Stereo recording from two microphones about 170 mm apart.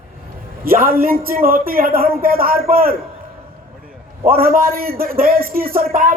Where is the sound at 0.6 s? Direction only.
60° right (ahead or behind).